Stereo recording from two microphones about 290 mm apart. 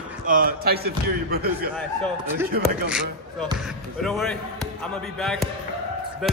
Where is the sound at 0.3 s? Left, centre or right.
Right.